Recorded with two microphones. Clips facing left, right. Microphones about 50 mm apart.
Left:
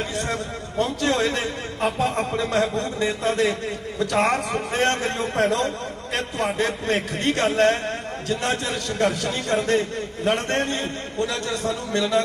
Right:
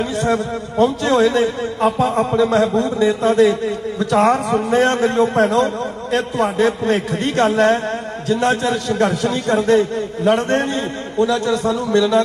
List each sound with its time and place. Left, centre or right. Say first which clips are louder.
0.0 s a man's voice: right 8 dB; right